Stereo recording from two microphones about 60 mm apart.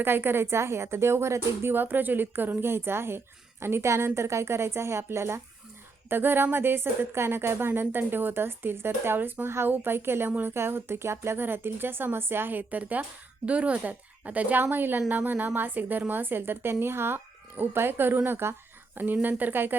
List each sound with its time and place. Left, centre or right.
0.0 s a woman's voice: right
1.7 s a woman's voice: right